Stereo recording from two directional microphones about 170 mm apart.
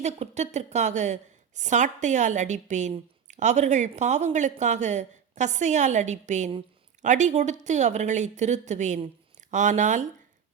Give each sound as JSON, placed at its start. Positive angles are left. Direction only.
{"t": 0.0, "sound": "speech", "side_deg": -40}